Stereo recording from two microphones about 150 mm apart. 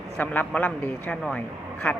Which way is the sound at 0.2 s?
10° left (ahead or behind).